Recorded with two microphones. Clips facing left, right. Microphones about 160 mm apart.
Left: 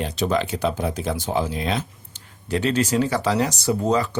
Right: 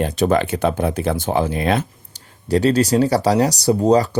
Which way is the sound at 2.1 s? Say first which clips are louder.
Right 7 dB; 35° right (ahead or behind).